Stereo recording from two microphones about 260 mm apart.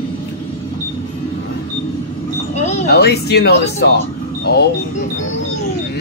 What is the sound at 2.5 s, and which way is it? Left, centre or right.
Wind chime, left.